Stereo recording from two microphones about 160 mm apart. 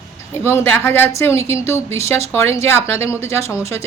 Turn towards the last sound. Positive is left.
turn(degrees=15)  # may be behind; listen again after turning